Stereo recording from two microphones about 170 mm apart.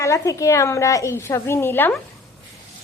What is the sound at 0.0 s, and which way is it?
A woman's voice, 20° left (ahead or behind).